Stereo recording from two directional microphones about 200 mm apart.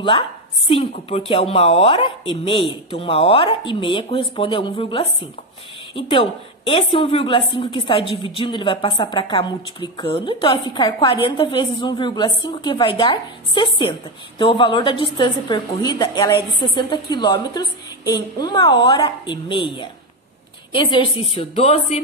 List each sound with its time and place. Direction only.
0.7 s a woman's voice: 30° left (ahead or behind)